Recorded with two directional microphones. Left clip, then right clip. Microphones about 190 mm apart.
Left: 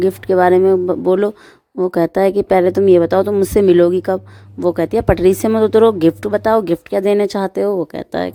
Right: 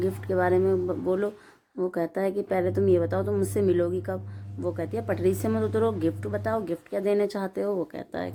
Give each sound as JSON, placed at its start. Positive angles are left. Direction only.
{"t": 0.0, "sound": "speech", "side_deg": 45}